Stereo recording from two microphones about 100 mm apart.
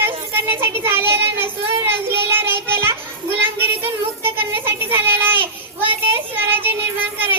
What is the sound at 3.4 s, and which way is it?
Child singing, 20° right (ahead or behind).